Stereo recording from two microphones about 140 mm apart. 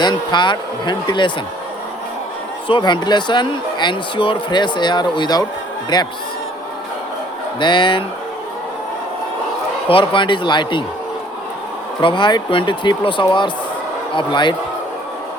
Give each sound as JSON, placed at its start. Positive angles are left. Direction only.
{"t": 0.0, "sound": "speech", "side_deg": 30}
{"t": 2.6, "sound": "speech", "side_deg": 35}
{"t": 7.6, "sound": "speech", "side_deg": 35}
{"t": 9.9, "sound": "speech", "side_deg": 35}
{"t": 11.9, "sound": "speech", "side_deg": 35}